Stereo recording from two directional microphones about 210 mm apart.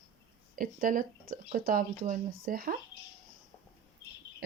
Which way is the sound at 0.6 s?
40° right (ahead or behind).